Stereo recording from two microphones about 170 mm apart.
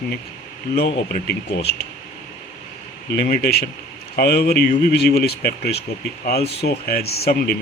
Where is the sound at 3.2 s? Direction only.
60° left (ahead or behind).